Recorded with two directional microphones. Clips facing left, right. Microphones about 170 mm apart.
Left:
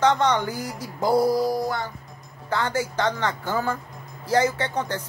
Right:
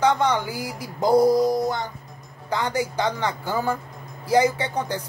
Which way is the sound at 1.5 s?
20° right (ahead or behind).